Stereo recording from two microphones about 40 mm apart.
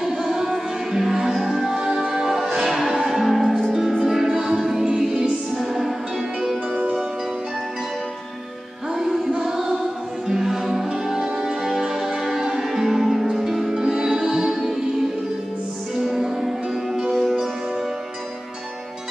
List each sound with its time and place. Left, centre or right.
0.0 s music: centre
3.2 s music: centre
6.7 s music: right
9.4 s choir: centre
10.2 s music: centre